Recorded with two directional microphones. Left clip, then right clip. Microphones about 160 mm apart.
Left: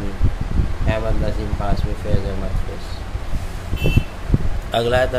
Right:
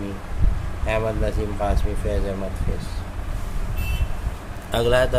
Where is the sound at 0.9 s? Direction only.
45° right (ahead or behind).